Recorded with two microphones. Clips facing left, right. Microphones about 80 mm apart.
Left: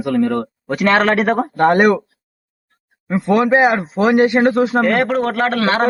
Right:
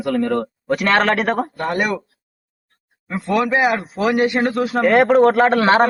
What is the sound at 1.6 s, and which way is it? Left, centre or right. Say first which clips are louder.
Speech: left 9 dB; left.